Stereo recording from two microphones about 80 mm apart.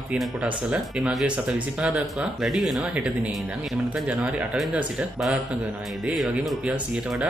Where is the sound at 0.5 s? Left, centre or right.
Centre.